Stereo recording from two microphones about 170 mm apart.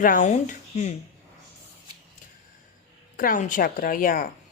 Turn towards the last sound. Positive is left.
turn(degrees=55)  # may be behind; listen again after turning